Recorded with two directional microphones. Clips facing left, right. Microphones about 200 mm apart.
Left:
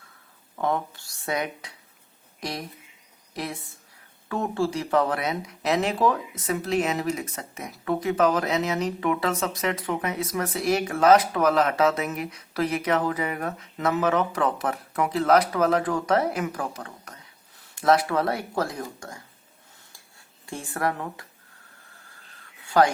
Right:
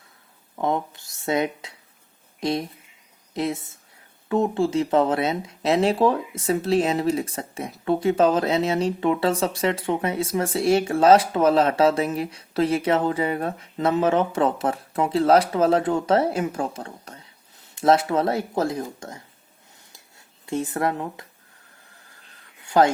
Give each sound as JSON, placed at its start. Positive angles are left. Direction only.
{"t": 0.5, "sound": "speech", "side_deg": -20}
{"t": 19.9, "sound": "a sound", "side_deg": -20}
{"t": 22.8, "sound": "speech", "side_deg": -20}